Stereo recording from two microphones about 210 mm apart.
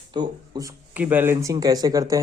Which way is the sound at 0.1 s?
20° right (ahead or behind).